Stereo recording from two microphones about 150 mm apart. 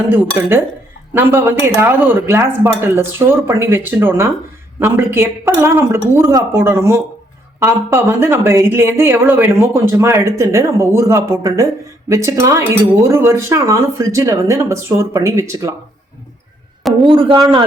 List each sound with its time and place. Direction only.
0.1 s speech: 15° right (ahead or behind)
16.8 s speech: centre (ahead or behind)